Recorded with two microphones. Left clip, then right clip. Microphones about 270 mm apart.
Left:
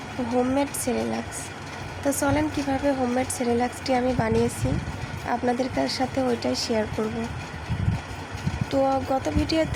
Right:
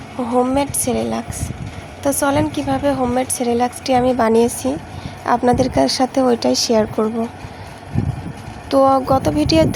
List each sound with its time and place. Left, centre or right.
0.2 s a woman's voice: centre
2.2 s a woman's voice: centre
8.7 s speech: right